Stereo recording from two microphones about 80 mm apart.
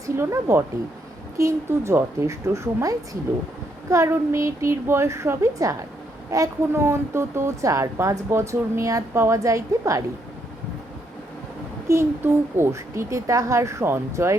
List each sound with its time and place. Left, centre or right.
0.2 s a woman's voice: right
11.9 s a woman's voice: right